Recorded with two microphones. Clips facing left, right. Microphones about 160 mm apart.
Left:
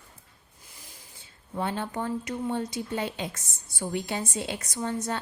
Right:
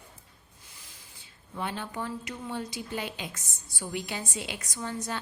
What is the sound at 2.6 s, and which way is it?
A woman's voice, 25° left (ahead or behind).